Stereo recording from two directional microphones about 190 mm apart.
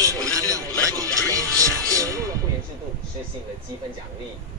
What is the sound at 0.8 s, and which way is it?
Music, 15° right (ahead or behind).